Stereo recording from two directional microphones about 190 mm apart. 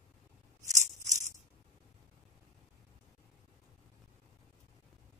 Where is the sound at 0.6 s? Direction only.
40° right (ahead or behind).